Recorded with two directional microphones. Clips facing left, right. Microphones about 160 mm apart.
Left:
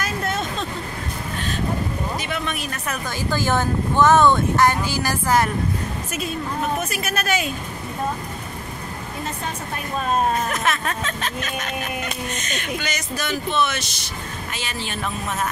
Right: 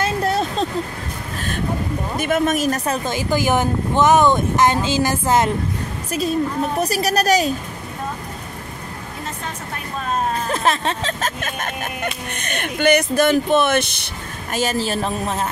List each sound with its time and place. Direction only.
0.0 s vehicle: 35° right (ahead or behind)
2.1 s speech: 45° right (ahead or behind)
3.1 s speech: 15° right (ahead or behind)
6.8 s a woman's voice: 35° right (ahead or behind)
10.4 s speech: 30° right (ahead or behind)
11.1 s speech: 45° right (ahead or behind)
14.5 s a woman's voice: 45° right (ahead or behind)